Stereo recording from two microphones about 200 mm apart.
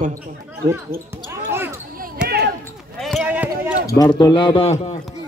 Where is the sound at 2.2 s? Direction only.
50° right (ahead or behind).